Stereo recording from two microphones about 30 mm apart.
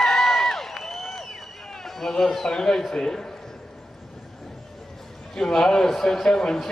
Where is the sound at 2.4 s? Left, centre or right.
Centre.